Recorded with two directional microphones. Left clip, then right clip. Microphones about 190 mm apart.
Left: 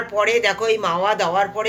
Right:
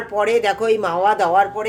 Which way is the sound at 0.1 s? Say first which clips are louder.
Right 1 dB; 40° right (ahead or behind).